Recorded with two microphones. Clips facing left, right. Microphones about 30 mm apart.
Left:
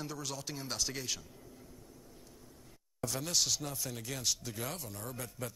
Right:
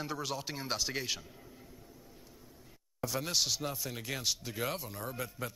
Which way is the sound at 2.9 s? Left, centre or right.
Centre.